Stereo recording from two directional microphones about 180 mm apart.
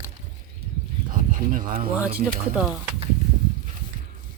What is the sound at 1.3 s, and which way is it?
Speech, 45° right (ahead or behind).